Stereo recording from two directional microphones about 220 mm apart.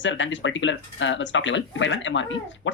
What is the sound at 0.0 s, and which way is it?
Speech, 55° left (ahead or behind).